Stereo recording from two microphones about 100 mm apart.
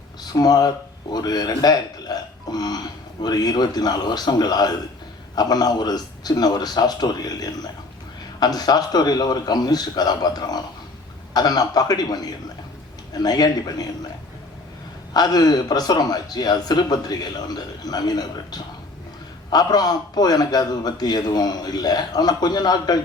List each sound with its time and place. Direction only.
0.2 s a man's voice: 40° left (ahead or behind)
15.1 s a man's voice: 40° left (ahead or behind)